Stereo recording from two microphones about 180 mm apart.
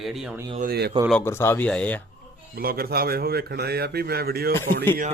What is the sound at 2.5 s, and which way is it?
A man's voice, 55° right (ahead or behind).